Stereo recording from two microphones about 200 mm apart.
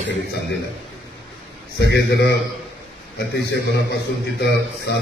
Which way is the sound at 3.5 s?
55° left (ahead or behind).